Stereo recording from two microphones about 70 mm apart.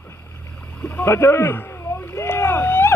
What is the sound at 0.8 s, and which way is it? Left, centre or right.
Vehicle, left.